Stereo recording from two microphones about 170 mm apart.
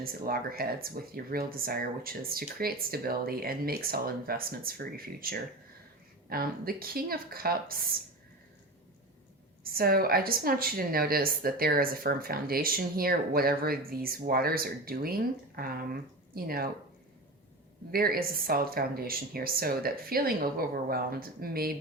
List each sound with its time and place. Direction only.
0.0 s a woman's voice: 60° right (ahead or behind)
9.7 s a woman's voice: 60° right (ahead or behind)
17.9 s a woman's voice: 60° right (ahead or behind)